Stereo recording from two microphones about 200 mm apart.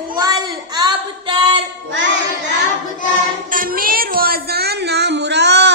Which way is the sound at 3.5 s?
45° right (ahead or behind).